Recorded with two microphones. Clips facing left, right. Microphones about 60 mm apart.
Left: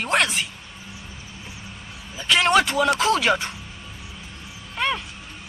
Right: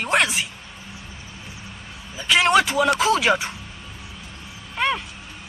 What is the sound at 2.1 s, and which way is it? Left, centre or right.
Speech, centre.